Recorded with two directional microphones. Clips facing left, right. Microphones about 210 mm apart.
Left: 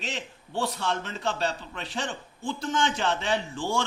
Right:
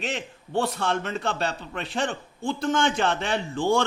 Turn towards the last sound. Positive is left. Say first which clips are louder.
# right 5 dB
turn(degrees=-55)  # may be behind; listen again after turning